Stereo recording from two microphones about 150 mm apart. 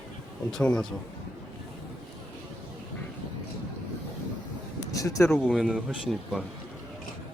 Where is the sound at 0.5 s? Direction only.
5° left (ahead or behind).